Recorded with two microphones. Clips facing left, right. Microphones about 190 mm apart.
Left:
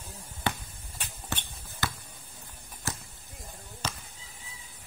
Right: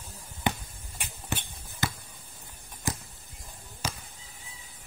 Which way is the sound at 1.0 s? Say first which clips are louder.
Right 2 dB; 10° right (ahead or behind).